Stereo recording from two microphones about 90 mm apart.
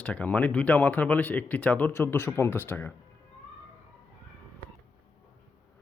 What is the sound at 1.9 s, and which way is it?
Speech, 30° left (ahead or behind).